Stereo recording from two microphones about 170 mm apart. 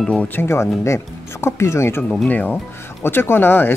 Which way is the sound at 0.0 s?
10° left (ahead or behind).